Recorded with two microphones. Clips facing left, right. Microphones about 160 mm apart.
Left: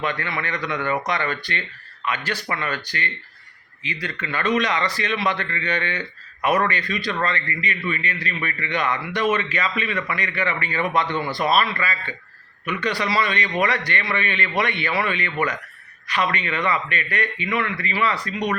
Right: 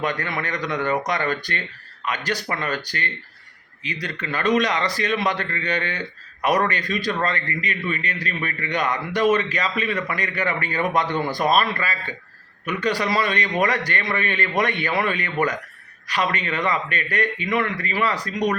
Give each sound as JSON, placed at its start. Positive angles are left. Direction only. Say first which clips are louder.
{"t": 0.0, "sound": "a man's voice", "louder": "right 1 dB", "side_deg": -45}